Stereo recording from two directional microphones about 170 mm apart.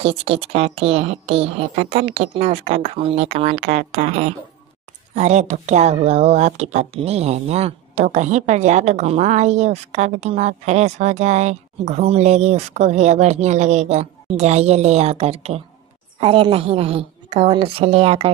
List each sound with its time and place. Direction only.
0.0 s speech: 35° right (ahead or behind)